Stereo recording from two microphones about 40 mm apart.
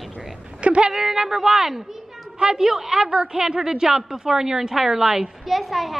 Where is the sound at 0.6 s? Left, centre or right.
Right.